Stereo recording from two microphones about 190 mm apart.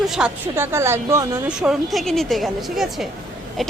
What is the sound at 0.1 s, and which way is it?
Speech, 10° right (ahead or behind).